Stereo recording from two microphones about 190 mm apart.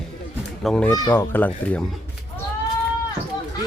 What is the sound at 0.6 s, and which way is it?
Speech, 5° left (ahead or behind).